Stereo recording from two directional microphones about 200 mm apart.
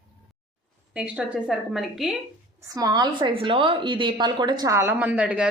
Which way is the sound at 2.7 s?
20° right (ahead or behind).